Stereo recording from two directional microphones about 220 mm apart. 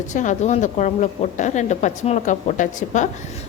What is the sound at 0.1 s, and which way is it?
A woman's voice, 35° left (ahead or behind).